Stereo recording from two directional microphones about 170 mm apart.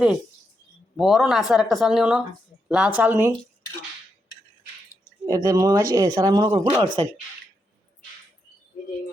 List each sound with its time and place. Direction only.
0.9 s speech: centre (ahead or behind)
5.2 s speech: 20° right (ahead or behind)